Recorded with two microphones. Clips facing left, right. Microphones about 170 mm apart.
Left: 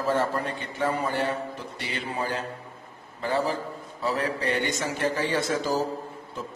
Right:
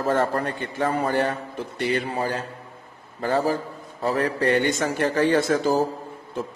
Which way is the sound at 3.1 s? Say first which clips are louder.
Right 4 dB; 45° right (ahead or behind).